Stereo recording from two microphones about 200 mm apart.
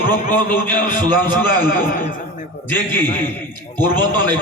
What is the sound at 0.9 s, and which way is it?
Speech, 20° right (ahead or behind).